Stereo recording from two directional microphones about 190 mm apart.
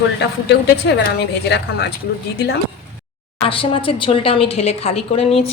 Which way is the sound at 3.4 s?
30° left (ahead or behind).